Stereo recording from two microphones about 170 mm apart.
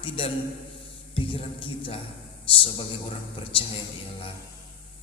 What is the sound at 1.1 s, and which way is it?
Music, 30° left (ahead or behind).